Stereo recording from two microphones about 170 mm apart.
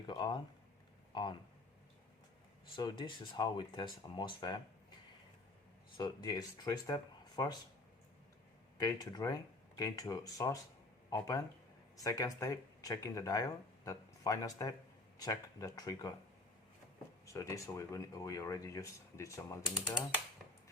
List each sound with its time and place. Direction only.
0.1 s speech: 25° left (ahead or behind)
2.7 s speech: 25° left (ahead or behind)
6.0 s speech: 25° left (ahead or behind)
8.8 s speech: 20° left (ahead or behind)
17.3 s speech: 15° left (ahead or behind)